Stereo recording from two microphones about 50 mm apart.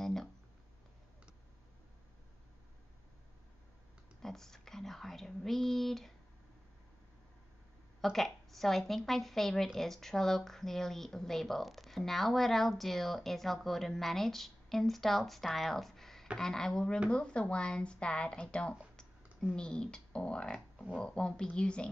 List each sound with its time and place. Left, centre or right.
0.0 s a sound: centre
4.2 s speech: centre
8.0 s speech: centre